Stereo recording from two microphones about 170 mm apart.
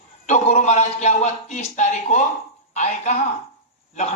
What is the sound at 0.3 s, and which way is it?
A man's voice, 40° left (ahead or behind).